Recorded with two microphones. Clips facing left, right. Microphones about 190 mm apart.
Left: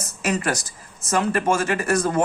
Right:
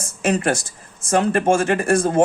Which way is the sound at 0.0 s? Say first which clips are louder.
Right 4 dB; 30° right (ahead or behind).